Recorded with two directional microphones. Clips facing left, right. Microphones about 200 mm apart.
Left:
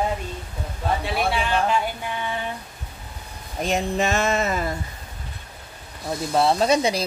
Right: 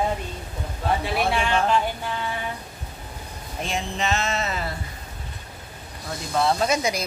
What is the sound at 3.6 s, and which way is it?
Speech, 40° left (ahead or behind).